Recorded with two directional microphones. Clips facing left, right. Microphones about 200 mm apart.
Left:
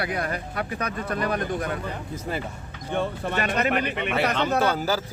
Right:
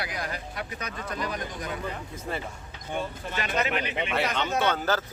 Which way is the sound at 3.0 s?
55° left (ahead or behind).